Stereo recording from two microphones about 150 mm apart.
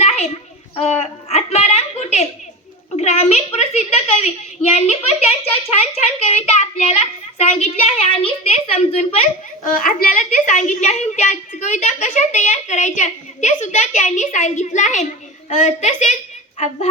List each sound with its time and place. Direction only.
0.8 s a sound: 45° left (ahead or behind)
2.9 s a woman's voice: 45° left (ahead or behind)
9.8 s a woman's voice: 65° left (ahead or behind)